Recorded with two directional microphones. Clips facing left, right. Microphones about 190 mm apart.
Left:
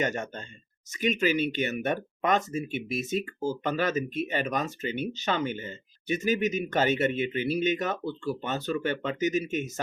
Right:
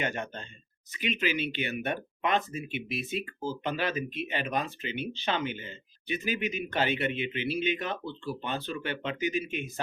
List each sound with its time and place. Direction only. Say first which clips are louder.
0.0 s speech: left 3 dB; 45° left (ahead or behind)